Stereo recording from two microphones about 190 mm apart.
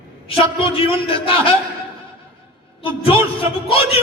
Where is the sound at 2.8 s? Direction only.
30° left (ahead or behind).